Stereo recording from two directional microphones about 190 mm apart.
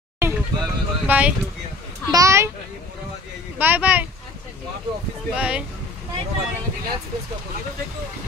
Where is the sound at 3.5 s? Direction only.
10° right (ahead or behind).